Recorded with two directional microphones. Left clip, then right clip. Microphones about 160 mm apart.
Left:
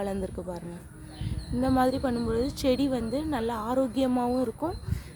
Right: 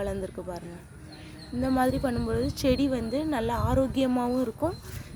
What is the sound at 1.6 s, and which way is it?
Speech, 15° left (ahead or behind).